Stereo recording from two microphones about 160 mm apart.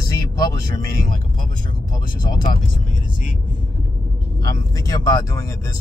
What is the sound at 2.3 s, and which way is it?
Speech, 25° left (ahead or behind).